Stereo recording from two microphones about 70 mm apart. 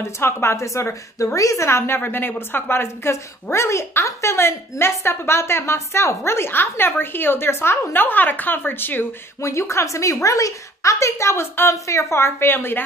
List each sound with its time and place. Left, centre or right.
0.0 s a woman's voice: left
2.0 s a woman's voice: left
9.4 s a woman's voice: left